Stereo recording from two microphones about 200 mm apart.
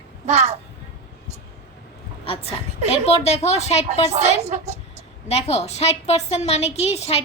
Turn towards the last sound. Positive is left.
turn(degrees=30)  # may be behind; listen again after turning